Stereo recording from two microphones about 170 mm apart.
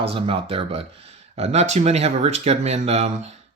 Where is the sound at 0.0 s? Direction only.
30° right (ahead or behind).